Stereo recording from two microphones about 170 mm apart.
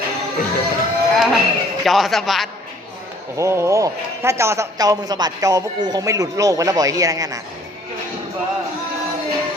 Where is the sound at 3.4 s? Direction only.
15° right (ahead or behind).